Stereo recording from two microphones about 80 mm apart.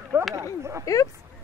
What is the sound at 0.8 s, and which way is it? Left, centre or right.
Speech, left.